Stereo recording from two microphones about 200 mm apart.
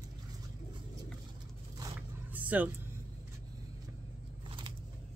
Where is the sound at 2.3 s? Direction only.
10° right (ahead or behind).